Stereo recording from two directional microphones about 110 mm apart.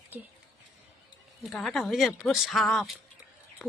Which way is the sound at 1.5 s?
Centre (ahead or behind).